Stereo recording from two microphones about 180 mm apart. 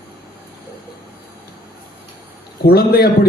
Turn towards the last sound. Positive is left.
turn(degrees=60)  # may be behind; listen again after turning